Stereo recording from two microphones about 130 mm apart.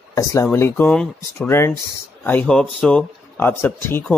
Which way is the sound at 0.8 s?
5° left (ahead or behind).